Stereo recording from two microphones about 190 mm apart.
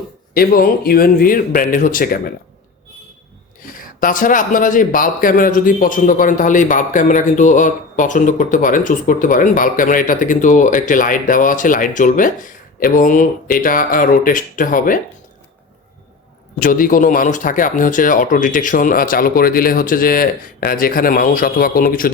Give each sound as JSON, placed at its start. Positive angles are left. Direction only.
{"t": 0.3, "sound": "speech", "side_deg": 50}
{"t": 4.0, "sound": "speech", "side_deg": 45}
{"t": 16.6, "sound": "speech", "side_deg": 45}